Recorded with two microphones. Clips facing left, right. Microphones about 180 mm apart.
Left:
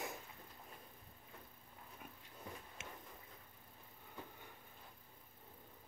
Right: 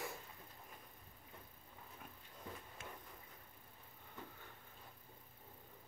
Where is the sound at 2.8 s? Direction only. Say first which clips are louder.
Right 1 dB; 20° left (ahead or behind).